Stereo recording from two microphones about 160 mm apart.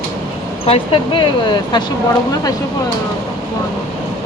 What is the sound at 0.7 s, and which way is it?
Speech, 30° left (ahead or behind).